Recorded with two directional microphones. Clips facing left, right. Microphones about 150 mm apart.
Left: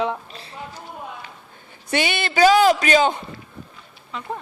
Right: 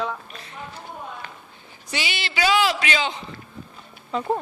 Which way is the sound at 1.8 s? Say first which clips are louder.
Left 7 dB; 55° left (ahead or behind).